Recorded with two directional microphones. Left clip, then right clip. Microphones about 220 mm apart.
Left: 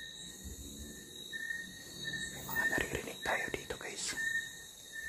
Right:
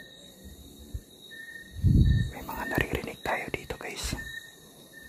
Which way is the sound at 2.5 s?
25° right (ahead or behind).